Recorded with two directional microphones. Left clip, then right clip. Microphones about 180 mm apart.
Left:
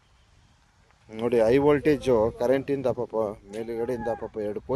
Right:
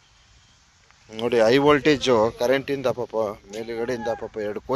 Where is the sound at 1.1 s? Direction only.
Centre (ahead or behind).